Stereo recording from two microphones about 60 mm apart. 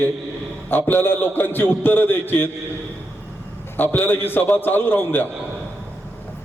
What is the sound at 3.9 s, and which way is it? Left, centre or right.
A man's voice, left.